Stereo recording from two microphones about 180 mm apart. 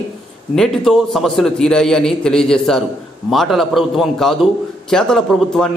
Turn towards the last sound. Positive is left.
turn(degrees=5)  # may be behind; listen again after turning